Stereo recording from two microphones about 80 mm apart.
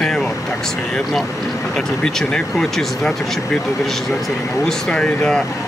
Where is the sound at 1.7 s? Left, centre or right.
Centre.